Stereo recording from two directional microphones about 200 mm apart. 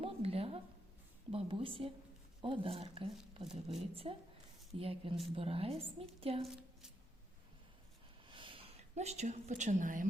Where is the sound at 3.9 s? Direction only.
30° right (ahead or behind).